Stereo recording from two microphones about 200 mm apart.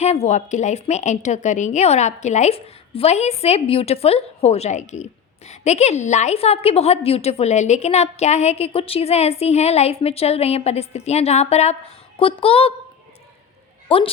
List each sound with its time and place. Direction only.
0.0 s a woman's voice: 35° left (ahead or behind)
13.8 s speech: 25° left (ahead or behind)